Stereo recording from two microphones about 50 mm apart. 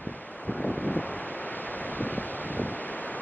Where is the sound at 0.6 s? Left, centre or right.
Left.